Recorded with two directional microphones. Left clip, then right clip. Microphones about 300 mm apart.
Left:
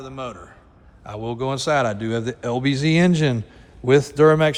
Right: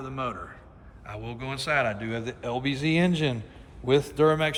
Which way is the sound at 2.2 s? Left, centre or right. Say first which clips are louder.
Left 5 dB; left.